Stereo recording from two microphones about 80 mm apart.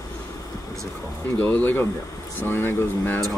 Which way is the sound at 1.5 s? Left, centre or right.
Left.